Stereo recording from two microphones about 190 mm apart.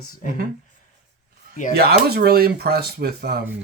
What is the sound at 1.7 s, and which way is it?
Speech, 55° right (ahead or behind).